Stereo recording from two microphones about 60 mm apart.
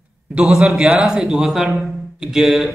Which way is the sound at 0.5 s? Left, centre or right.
Centre.